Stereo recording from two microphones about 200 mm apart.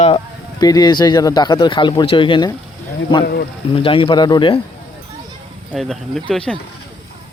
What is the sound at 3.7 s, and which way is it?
Speech, 25° left (ahead or behind).